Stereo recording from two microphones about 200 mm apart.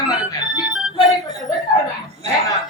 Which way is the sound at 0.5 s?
Centre (ahead or behind).